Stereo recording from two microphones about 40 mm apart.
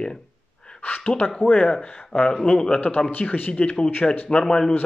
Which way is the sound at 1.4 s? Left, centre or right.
Left.